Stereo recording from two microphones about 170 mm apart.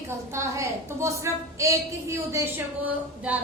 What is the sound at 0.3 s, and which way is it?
A woman's voice, 15° right (ahead or behind).